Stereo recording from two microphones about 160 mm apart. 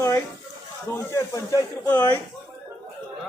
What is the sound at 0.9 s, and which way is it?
Speech, 20° left (ahead or behind).